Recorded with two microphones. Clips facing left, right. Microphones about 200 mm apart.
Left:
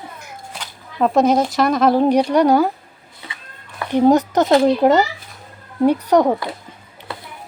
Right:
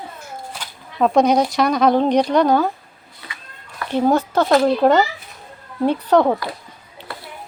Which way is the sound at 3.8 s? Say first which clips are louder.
Left 4 dB; 20° left (ahead or behind).